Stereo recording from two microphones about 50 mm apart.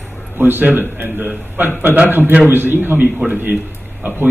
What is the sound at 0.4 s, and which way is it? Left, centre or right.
A man's voice, right.